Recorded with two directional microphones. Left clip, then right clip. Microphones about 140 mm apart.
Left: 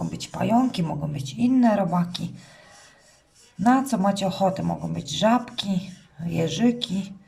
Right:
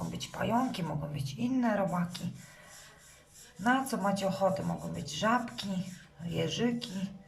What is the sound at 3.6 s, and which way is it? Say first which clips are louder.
Speech: left 8 dB; 30° left (ahead or behind).